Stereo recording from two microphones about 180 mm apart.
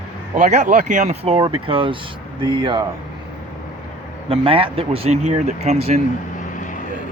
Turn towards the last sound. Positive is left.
turn(degrees=45)  # may be behind; listen again after turning